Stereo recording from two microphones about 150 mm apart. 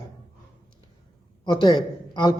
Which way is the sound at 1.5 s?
30° left (ahead or behind).